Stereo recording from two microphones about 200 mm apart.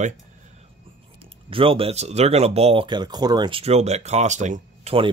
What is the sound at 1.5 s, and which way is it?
Speech, 25° right (ahead or behind).